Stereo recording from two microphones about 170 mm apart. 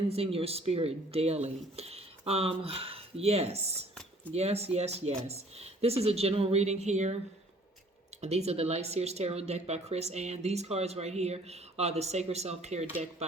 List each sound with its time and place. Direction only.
0.1 s speech: 35° right (ahead or behind)
8.2 s speech: 40° right (ahead or behind)